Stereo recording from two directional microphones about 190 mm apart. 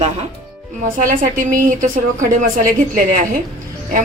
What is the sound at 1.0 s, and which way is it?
Speech, 45° right (ahead or behind).